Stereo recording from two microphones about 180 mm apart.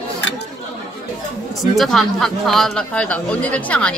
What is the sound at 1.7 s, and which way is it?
Speech, centre (ahead or behind).